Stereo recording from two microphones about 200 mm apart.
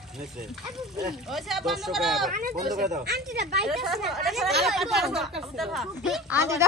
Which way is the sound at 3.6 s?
Centre (ahead or behind).